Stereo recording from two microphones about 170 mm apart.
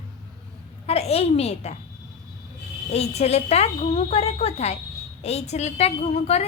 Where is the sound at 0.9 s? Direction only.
35° left (ahead or behind).